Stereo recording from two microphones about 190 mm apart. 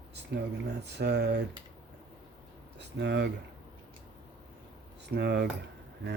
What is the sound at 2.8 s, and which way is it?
Speech, 65° right (ahead or behind).